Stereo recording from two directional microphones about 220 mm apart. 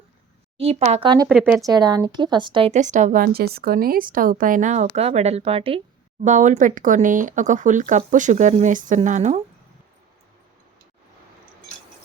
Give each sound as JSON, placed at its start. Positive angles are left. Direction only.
{"t": 0.5, "sound": "speech", "side_deg": -25}
{"t": 1.3, "sound": "speech", "side_deg": 0}
{"t": 1.6, "sound": "a woman's voice", "side_deg": -20}